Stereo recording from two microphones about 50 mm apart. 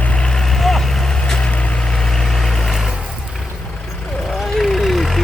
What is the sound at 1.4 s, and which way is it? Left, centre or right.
Vehicle, left.